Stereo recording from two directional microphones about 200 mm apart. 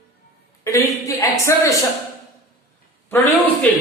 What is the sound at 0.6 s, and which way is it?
A woman's voice, 15° left (ahead or behind).